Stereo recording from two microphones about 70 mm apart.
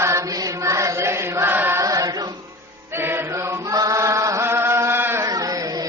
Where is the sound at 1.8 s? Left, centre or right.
Right.